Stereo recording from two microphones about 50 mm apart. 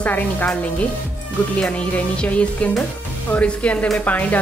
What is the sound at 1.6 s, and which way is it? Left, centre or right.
A woman's voice, left.